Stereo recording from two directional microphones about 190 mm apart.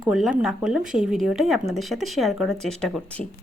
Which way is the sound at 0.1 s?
Centre (ahead or behind).